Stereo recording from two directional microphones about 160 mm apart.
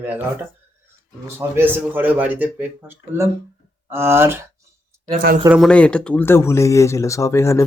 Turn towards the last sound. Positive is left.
turn(degrees=15)  # may be behind; listen again after turning